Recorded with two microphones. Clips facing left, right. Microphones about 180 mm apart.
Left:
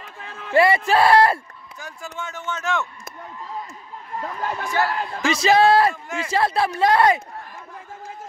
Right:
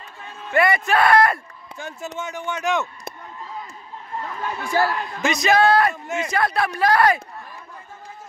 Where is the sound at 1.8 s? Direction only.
25° right (ahead or behind).